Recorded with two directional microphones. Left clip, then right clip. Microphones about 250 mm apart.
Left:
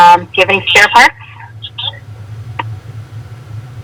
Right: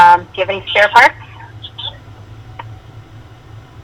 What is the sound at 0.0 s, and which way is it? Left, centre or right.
Speech, left.